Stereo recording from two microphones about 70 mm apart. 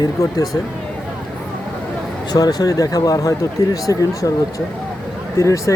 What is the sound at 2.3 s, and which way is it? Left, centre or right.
Speech, left.